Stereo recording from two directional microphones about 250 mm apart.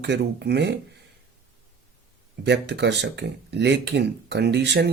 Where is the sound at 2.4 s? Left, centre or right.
Right.